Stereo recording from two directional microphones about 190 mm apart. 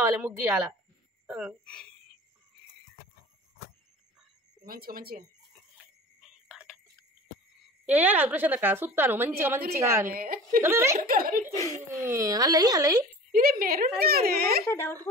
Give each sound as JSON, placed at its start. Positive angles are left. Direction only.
{"t": 0.0, "sound": "a woman's voice", "side_deg": -10}
{"t": 1.2, "sound": "a sound", "side_deg": -5}
{"t": 1.6, "sound": "speech", "side_deg": 5}
{"t": 4.6, "sound": "a woman's voice", "side_deg": -50}
{"t": 6.2, "sound": "a sound", "side_deg": -5}
{"t": 7.8, "sound": "a woman's voice", "side_deg": -10}
{"t": 10.1, "sound": "a woman's voice", "side_deg": -50}
{"t": 10.6, "sound": "a woman's voice", "side_deg": -15}
{"t": 11.0, "sound": "a woman's voice", "side_deg": -50}
{"t": 11.5, "sound": "speech", "side_deg": 15}
{"t": 12.0, "sound": "speech", "side_deg": -15}
{"t": 13.3, "sound": "a woman's voice", "side_deg": -50}
{"t": 14.7, "sound": "speech", "side_deg": 10}